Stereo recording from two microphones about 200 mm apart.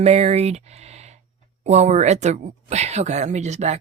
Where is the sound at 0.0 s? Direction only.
30° right (ahead or behind).